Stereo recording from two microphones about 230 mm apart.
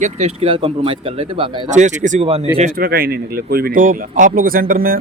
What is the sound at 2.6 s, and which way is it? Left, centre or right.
Speech, right.